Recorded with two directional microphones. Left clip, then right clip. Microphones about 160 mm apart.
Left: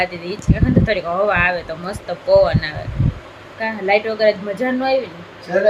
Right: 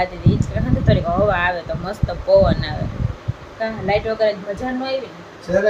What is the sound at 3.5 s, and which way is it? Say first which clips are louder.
Speech: left 3 dB; 45° left (ahead or behind).